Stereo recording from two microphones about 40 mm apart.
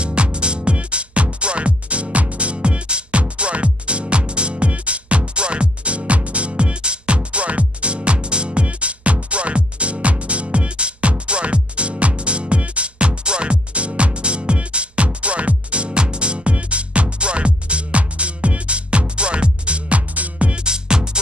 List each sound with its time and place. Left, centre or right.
0.0 s music: right